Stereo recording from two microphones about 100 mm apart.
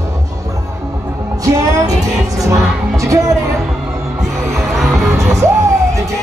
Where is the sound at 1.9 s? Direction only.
5° right (ahead or behind).